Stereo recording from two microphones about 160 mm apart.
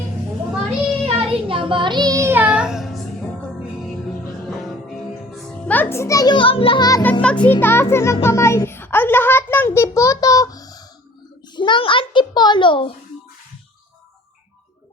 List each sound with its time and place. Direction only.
1.0 s child singing: 35° right (ahead or behind); by 3.0 s centre (ahead or behind)
4.4 s music: centre (ahead or behind); by 7.0 s 25° left (ahead or behind)
7.0 s a child's voice: 10° left (ahead or behind); by 12.9 s 30° left (ahead or behind)